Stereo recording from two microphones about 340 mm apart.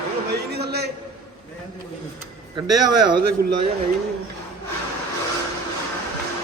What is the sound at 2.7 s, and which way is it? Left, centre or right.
Speech, right.